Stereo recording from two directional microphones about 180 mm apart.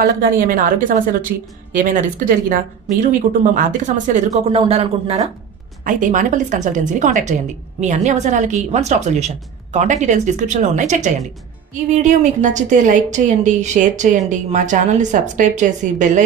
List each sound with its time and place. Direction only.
0.0 s a woman's voice: 50° right (ahead or behind)
4.5 s a woman's voice: 30° right (ahead or behind)
5.9 s a woman's voice: 45° right (ahead or behind)